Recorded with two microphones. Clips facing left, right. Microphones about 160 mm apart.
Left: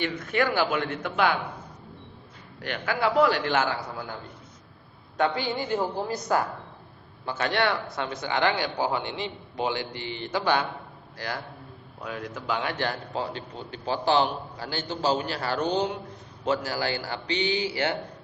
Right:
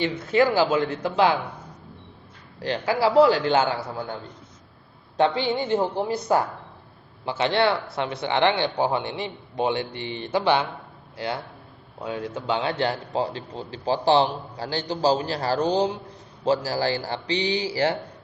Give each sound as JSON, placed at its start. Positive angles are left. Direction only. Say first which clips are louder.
{"t": 0.0, "sound": "a man's voice", "louder": "right 5 dB", "side_deg": -25}
{"t": 2.6, "sound": "a man's voice", "louder": "right 5 dB", "side_deg": -30}
{"t": 5.1, "sound": "a man's voice", "louder": "right 4 dB", "side_deg": -25}
{"t": 11.9, "sound": "a man's voice", "louder": "right 5 dB", "side_deg": -25}